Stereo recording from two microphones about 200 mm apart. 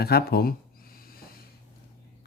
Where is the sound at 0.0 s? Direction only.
50° left (ahead or behind).